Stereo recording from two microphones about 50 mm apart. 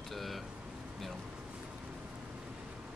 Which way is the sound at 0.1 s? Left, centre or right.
Centre.